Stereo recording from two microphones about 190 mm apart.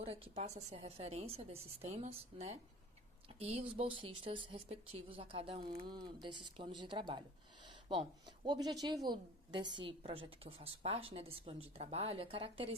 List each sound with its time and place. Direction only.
0.0 s a woman's voice: 35° right (ahead or behind)
7.7 s a sound: 25° right (ahead or behind)
8.4 s a woman's voice: 20° right (ahead or behind)